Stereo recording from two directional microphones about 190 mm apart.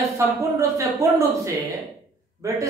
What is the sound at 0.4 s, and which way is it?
A woman's voice, 15° right (ahead or behind).